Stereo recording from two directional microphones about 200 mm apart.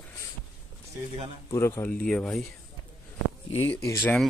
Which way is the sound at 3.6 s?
15° left (ahead or behind).